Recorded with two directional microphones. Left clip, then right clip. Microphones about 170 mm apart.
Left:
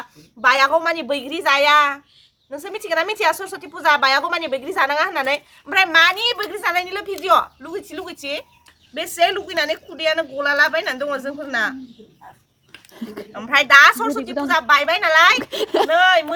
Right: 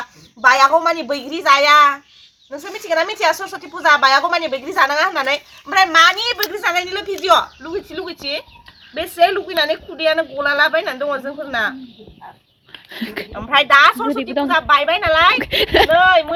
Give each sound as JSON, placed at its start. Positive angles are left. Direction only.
{"t": 0.4, "sound": "speech", "side_deg": 25}
{"t": 7.6, "sound": "a woman's voice", "side_deg": 5}
{"t": 12.9, "sound": "a woman's voice", "side_deg": -5}